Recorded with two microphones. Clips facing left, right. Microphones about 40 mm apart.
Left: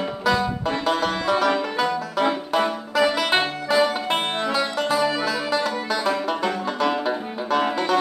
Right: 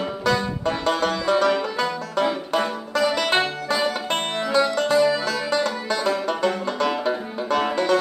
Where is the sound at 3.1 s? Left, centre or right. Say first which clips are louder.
Even; centre.